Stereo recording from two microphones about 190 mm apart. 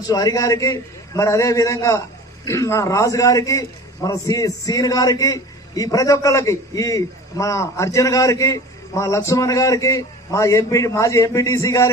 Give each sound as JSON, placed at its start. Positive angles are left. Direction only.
{"t": 0.1, "sound": "a man's voice", "side_deg": 20}